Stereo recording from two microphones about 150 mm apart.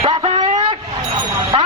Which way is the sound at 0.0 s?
35° right (ahead or behind).